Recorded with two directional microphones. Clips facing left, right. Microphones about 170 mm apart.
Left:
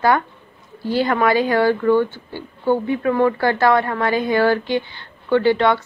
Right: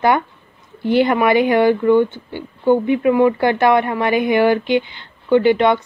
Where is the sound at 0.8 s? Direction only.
20° right (ahead or behind).